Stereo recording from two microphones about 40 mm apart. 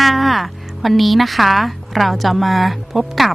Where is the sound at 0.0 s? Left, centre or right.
Centre.